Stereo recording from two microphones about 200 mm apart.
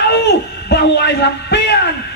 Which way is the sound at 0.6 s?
55° left (ahead or behind).